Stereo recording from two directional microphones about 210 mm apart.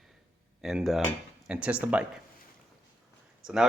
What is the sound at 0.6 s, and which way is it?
Speech, centre (ahead or behind).